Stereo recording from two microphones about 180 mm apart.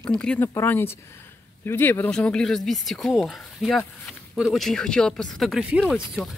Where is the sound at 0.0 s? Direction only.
5° left (ahead or behind).